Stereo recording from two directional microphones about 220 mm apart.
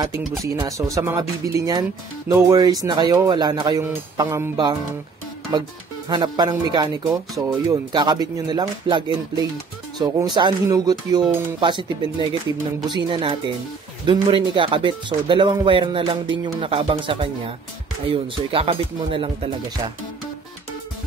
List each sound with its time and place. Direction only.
0.6 s speech: 15° right (ahead or behind)
6.0 s speech: 20° right (ahead or behind)